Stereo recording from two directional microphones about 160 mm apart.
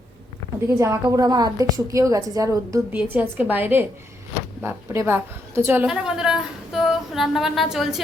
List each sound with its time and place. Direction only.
0.7 s a woman's voice: 20° right (ahead or behind)
2.9 s a woman's voice: 10° right (ahead or behind)